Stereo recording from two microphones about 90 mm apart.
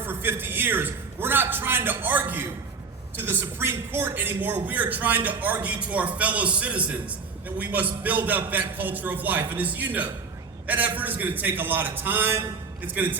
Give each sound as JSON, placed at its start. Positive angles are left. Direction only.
{"t": 0.0, "sound": "a man's voice", "side_deg": -25}